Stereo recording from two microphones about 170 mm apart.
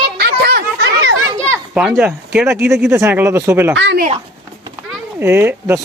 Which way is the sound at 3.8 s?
90° right.